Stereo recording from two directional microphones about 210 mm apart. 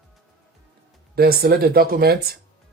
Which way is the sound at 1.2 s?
45° right (ahead or behind).